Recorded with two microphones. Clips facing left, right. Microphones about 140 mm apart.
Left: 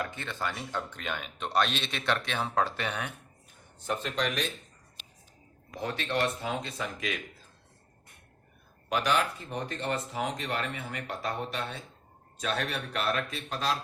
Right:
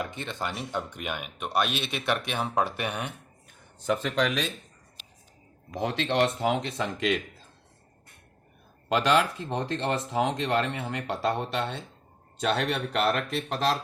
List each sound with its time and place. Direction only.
0.0 s speech: 20° right (ahead or behind)
3.8 s speech: 90° right
5.7 s speech: 75° right (ahead or behind)
8.9 s speech: 90° right; by 13.7 s 65° right (ahead or behind)